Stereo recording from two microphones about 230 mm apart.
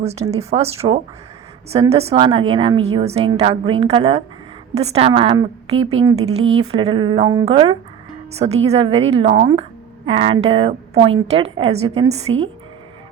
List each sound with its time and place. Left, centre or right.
0.0 s a woman's voice: right
6.4 s speech: right
6.7 s a woman's voice: right